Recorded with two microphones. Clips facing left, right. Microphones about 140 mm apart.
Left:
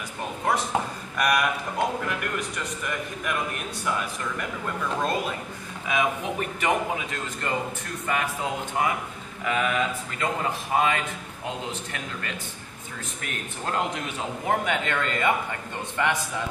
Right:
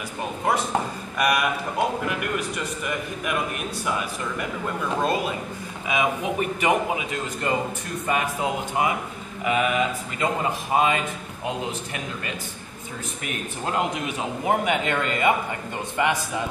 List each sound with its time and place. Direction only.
0.5 s speech: 5° right (ahead or behind)